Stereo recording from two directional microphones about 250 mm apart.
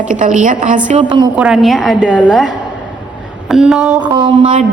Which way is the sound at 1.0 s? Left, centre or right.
Centre.